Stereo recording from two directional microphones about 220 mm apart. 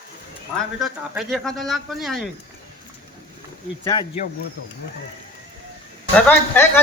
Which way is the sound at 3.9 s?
20° left (ahead or behind).